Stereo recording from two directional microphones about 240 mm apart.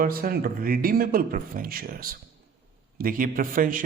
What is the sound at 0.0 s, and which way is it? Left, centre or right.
Speech, right.